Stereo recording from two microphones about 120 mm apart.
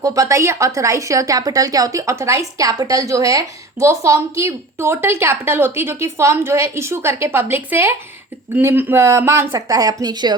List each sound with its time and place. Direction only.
0.0 s speech: 25° right (ahead or behind)